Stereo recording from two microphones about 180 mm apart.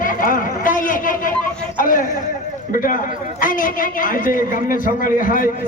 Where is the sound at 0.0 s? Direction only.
50° left (ahead or behind).